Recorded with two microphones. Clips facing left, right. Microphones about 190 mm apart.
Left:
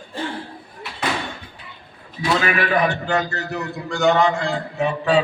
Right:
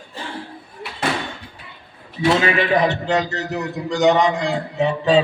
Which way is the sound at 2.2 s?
25° right (ahead or behind).